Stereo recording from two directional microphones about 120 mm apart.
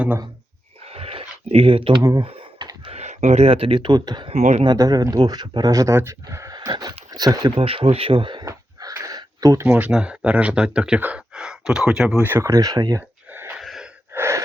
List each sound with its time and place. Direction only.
0.9 s a sound: 55° right (ahead or behind)
2.0 s speech: 25° right (ahead or behind)
2.2 s computer keyboard: 45° right (ahead or behind)
2.9 s speech: 70° right (ahead or behind); by 4.3 s 35° right (ahead or behind)
4.3 s speech: 65° right (ahead or behind)
4.6 s speech: 35° right (ahead or behind)
7.5 s speech: 50° right (ahead or behind)
8.4 s a sound: 30° right (ahead or behind)
9.6 s speech: 10° right (ahead or behind)
12.2 s speech: 20° right (ahead or behind)
13.0 s a sound: 20° right (ahead or behind)
13.6 s wheeze: centre (ahead or behind)
14.1 s gasp: 20° right (ahead or behind)